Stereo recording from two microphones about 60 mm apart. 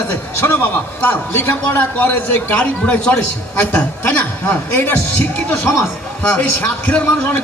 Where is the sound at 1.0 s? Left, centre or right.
Left.